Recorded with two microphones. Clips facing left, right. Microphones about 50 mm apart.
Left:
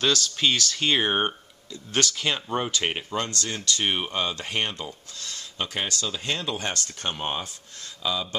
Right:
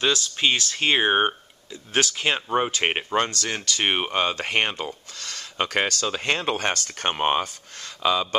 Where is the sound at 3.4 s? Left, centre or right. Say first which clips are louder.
Right 2 dB; right.